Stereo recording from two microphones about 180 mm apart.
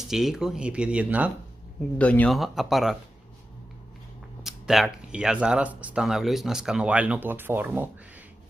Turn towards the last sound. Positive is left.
turn(degrees=-10)  # may be behind; listen again after turning